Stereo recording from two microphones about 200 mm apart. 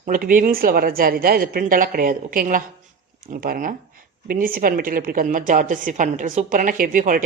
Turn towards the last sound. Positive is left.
turn(degrees=-40)  # may be behind; listen again after turning